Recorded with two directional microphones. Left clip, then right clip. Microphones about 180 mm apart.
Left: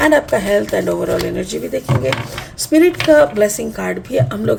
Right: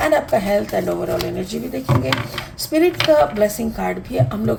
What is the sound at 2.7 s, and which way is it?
Speech, 50° left (ahead or behind).